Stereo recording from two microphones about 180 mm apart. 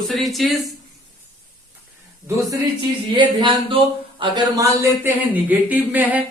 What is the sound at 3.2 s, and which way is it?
Speech, 30° right (ahead or behind).